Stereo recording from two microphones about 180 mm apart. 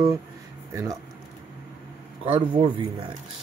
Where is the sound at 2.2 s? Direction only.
30° right (ahead or behind).